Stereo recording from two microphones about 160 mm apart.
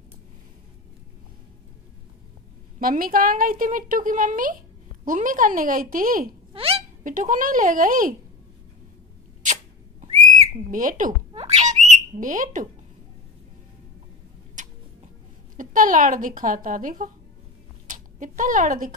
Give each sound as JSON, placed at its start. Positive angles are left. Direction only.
{"t": 2.8, "sound": "a woman's voice", "side_deg": -60}
{"t": 6.5, "sound": "hiccup", "side_deg": -40}
{"t": 7.1, "sound": "a woman's voice", "side_deg": -55}
{"t": 10.7, "sound": "a woman's voice", "side_deg": -55}
{"t": 11.3, "sound": "bird", "side_deg": -45}
{"t": 14.6, "sound": "a sound", "side_deg": -50}
{"t": 15.5, "sound": "a woman's voice", "side_deg": -55}